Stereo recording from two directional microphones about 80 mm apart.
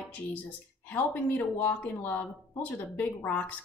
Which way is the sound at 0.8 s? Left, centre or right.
Left.